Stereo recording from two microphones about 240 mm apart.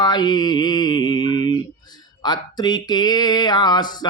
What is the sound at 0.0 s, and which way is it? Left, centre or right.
Mantra, centre.